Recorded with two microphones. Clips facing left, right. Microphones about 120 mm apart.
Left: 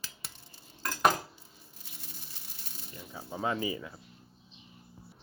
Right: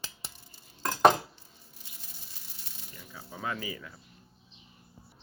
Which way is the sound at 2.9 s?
25° left (ahead or behind).